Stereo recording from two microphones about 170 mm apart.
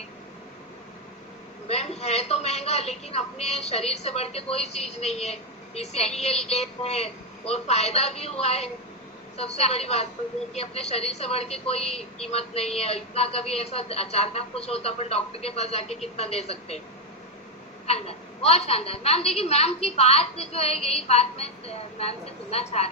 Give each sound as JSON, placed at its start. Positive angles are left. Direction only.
{"t": 1.6, "sound": "a woman's voice", "side_deg": 35}
{"t": 17.8, "sound": "a woman's voice", "side_deg": 35}